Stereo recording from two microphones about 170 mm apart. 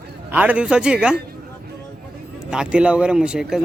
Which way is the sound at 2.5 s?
5° right (ahead or behind).